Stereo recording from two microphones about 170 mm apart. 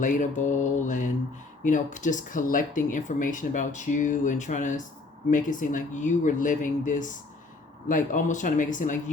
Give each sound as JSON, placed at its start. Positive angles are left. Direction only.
{"t": 0.0, "sound": "speech", "side_deg": 50}